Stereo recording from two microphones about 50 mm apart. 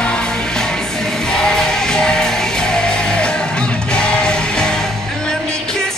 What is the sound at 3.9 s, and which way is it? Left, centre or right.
Music, centre.